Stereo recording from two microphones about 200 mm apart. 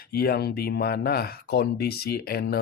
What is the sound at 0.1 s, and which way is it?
Speech, 50° left (ahead or behind).